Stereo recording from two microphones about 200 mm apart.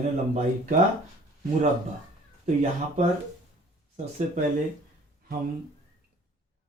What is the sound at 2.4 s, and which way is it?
Speech, 35° right (ahead or behind).